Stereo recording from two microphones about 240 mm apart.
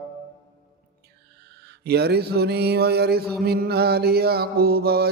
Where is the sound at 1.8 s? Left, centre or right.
Right.